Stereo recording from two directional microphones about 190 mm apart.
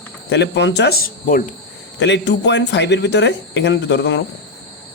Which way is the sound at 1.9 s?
65° left (ahead or behind).